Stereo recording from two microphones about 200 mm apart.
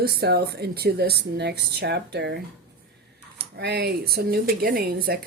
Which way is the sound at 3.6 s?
55° right (ahead or behind).